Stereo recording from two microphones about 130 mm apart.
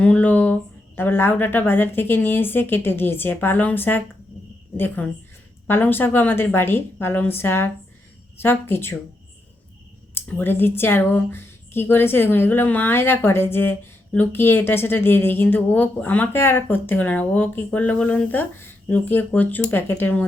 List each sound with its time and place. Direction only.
0.0 s speech: 10° left (ahead or behind)
5.6 s speech: 15° left (ahead or behind)
10.2 s speech: 15° left (ahead or behind)